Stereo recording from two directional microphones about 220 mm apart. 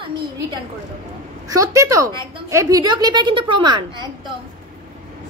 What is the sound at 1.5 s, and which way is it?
A woman's voice, 15° right (ahead or behind).